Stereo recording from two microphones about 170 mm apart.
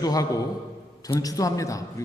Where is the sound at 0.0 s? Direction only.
20° left (ahead or behind).